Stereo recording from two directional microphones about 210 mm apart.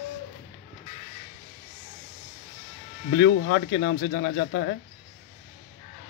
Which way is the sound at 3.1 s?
55° left (ahead or behind).